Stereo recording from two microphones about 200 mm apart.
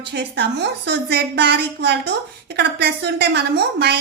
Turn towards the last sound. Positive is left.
turn(degrees=-55)  # may be behind; listen again after turning